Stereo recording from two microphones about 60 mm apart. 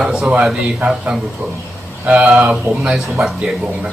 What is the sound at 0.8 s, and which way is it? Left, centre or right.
Speech, centre.